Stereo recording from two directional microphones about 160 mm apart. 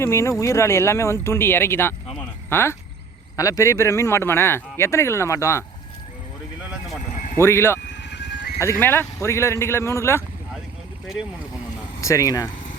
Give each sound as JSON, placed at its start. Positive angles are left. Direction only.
{"t": 0.0, "sound": "speech", "side_deg": 15}
{"t": 6.6, "sound": "a sound", "side_deg": -5}
{"t": 7.3, "sound": "speech", "side_deg": 15}
{"t": 7.9, "sound": "vehicle", "side_deg": 90}
{"t": 8.8, "sound": "speech", "side_deg": 15}
{"t": 11.9, "sound": "speech", "side_deg": 20}